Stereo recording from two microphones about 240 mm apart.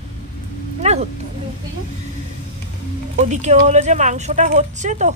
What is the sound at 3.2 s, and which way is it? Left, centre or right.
Speech, right.